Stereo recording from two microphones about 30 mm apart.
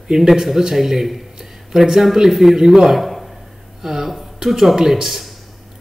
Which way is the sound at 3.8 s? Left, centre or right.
Centre.